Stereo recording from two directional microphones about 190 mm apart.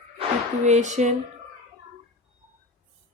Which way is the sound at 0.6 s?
40° right (ahead or behind).